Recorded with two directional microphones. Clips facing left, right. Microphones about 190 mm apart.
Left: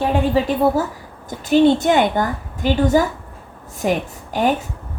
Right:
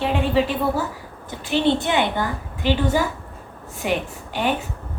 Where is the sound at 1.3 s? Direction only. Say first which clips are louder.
Left 6 dB; 45° left (ahead or behind).